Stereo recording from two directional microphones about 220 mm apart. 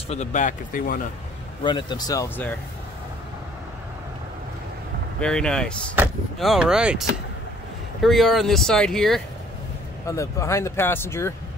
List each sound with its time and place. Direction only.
0.1 s speech: 30° left (ahead or behind)
1.6 s speech: 20° left (ahead or behind)
5.2 s speech: 5° left (ahead or behind)
10.0 s speech: 15° left (ahead or behind)